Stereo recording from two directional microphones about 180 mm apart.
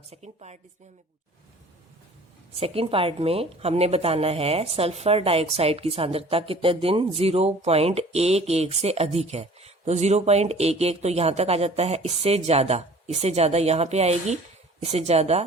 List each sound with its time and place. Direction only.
0.1 s a woman's voice: 35° right (ahead or behind)
2.6 s a woman's voice: 30° right (ahead or behind)